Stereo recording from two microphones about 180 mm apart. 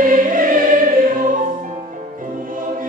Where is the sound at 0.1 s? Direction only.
50° right (ahead or behind).